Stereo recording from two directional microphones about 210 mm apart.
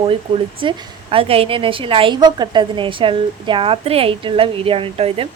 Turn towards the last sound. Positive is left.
turn(degrees=-25)  # may be behind; listen again after turning